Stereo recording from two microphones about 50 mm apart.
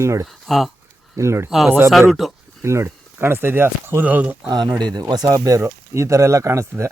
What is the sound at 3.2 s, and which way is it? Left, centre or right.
Speech, right.